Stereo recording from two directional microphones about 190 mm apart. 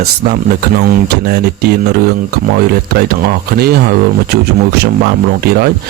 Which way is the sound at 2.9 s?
55° right (ahead or behind).